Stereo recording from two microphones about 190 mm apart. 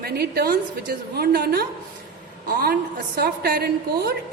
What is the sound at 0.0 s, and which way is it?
A woman's voice, 55° right (ahead or behind).